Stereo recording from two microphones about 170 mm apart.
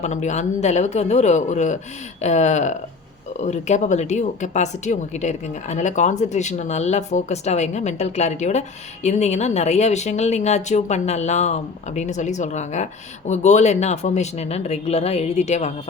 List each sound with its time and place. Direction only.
0.0 s speech: 45° left (ahead or behind)